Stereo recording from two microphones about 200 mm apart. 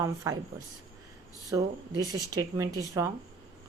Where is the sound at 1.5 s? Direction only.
20° right (ahead or behind).